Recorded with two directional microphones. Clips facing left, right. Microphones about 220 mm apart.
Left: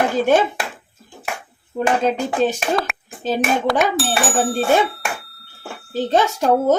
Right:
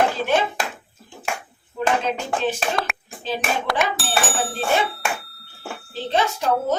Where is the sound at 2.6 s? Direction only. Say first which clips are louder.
Left 4 dB; centre (ahead or behind).